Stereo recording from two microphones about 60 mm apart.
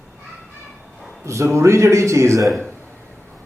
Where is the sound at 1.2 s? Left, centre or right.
Right.